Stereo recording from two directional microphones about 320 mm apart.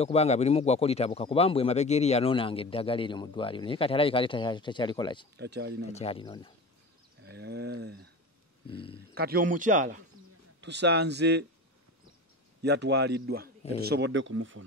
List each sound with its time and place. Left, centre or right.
0.0 s speech: centre
5.4 s a man's voice: right
5.9 s speech: centre
7.2 s a sound: right
9.1 s a man's voice: right
12.6 s a man's voice: right